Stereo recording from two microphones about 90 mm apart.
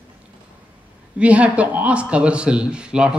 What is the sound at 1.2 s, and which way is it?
A man's voice, 15° right (ahead or behind).